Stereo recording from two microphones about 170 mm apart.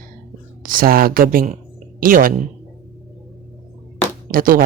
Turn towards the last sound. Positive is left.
turn(degrees=-55)  # may be behind; listen again after turning